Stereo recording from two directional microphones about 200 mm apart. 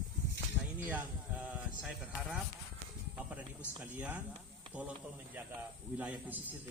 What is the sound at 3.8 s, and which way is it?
Speech, 5° right (ahead or behind).